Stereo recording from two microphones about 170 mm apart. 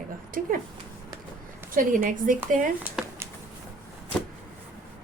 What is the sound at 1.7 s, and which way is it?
Speech, 55° right (ahead or behind).